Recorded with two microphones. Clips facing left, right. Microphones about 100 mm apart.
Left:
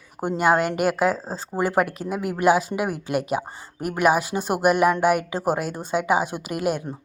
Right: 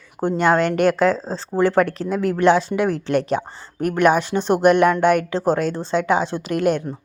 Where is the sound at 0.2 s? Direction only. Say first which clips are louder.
Right 3 dB; 10° left (ahead or behind).